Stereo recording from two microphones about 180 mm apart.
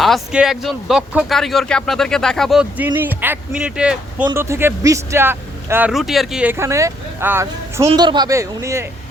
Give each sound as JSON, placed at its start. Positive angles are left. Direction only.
{"t": 0.0, "sound": "speech", "side_deg": 0}
{"t": 5.9, "sound": "speech", "side_deg": 0}
{"t": 7.9, "sound": "speech", "side_deg": -25}